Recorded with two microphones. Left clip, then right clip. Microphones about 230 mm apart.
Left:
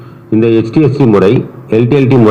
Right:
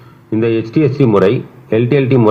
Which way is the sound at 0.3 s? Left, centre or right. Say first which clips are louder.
Left 5 dB; centre.